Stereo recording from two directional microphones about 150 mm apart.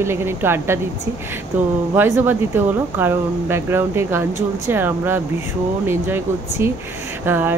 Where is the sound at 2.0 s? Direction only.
15° right (ahead or behind).